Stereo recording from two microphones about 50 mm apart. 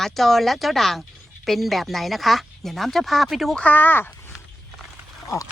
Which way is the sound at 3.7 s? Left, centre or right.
Left.